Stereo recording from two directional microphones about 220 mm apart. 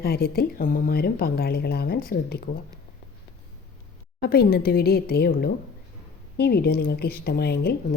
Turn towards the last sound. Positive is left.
turn(degrees=45)  # may be behind; listen again after turning